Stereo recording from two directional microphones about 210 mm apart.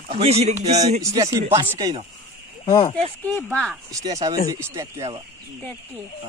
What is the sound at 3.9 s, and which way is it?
A man's voice, 15° right (ahead or behind).